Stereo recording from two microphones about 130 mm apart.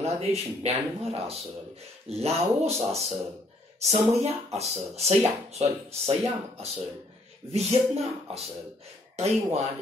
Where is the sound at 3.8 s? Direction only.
55° right (ahead or behind).